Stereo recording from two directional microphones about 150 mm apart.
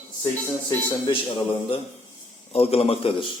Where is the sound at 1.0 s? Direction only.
35° left (ahead or behind).